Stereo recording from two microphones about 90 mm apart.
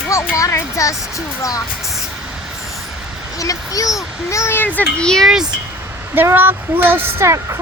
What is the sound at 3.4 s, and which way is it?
A child's voice, 40° left (ahead or behind).